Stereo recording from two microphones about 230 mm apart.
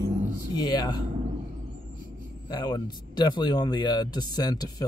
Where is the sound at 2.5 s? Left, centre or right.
Centre.